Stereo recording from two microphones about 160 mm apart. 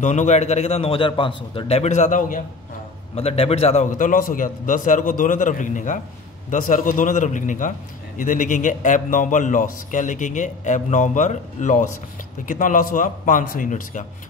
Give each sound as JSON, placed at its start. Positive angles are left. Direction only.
{"t": 0.0, "sound": "a man's voice", "side_deg": 50}
{"t": 3.2, "sound": "a man's voice", "side_deg": 40}